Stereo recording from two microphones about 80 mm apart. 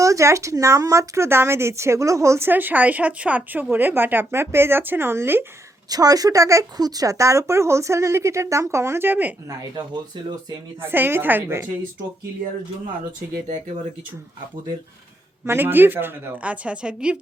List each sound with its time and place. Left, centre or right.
0.0 s speech: right
2.5 s speech: right
5.9 s speech: right
9.7 s speech: right
10.8 s speech: right
15.4 s speech: right
16.4 s a woman's voice: centre